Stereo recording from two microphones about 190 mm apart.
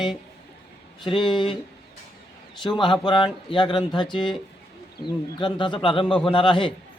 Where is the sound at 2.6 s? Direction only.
25° left (ahead or behind).